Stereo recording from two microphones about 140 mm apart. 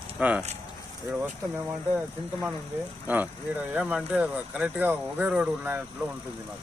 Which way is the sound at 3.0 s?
10° right (ahead or behind).